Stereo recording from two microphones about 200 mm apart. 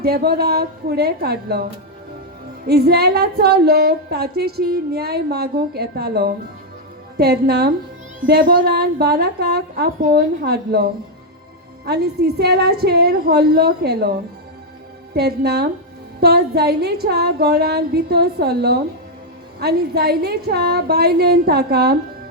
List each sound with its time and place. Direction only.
0.0 s a woman's voice: 50° right (ahead or behind)
2.6 s a woman's voice: 50° right (ahead or behind)
11.9 s a woman's voice: 55° right (ahead or behind)
15.1 s a woman's voice: 55° right (ahead or behind)